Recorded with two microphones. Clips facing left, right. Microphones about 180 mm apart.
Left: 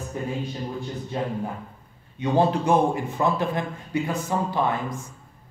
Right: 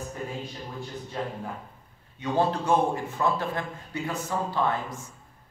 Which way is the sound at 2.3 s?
15° left (ahead or behind).